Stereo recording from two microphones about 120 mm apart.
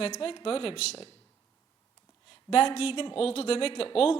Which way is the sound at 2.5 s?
55° left (ahead or behind).